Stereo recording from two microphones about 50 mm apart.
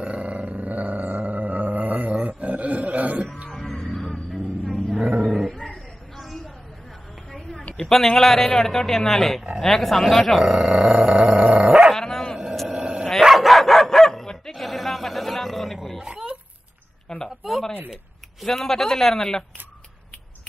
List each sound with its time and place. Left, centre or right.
0.0 s roar: right
3.5 s music: centre
5.2 s dog: centre
5.5 s a sound: centre
8.1 s speech: centre
10.4 s growling: centre
11.4 s dog: centre
11.9 s dog: centre
12.6 s dog: centre
13.2 s dog: centre
16.0 s dog: centre
17.4 s a sound: centre
18.4 s speech: centre